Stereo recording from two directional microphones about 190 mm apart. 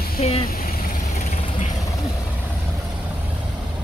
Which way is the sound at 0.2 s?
35° left (ahead or behind).